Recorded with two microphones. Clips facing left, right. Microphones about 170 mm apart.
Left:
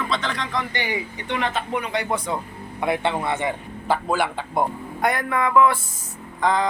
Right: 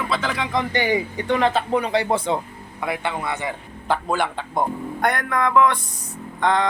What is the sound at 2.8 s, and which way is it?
Speech, 25° left (ahead or behind).